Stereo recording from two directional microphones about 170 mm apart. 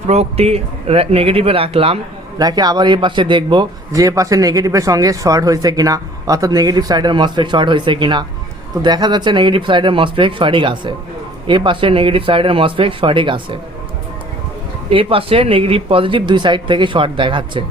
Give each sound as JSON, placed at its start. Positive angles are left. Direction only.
{"t": 0.1, "sound": "speech", "side_deg": -35}
{"t": 2.4, "sound": "speech", "side_deg": -25}
{"t": 14.8, "sound": "speech", "side_deg": -35}